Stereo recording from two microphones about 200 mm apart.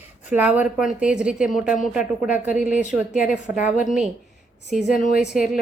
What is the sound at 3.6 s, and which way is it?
Speech, 40° left (ahead or behind).